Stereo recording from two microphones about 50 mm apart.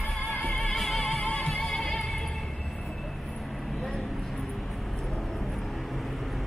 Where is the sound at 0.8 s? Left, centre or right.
Centre.